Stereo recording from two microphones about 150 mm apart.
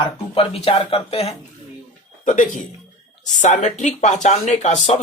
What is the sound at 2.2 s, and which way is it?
Speech, 55° left (ahead or behind).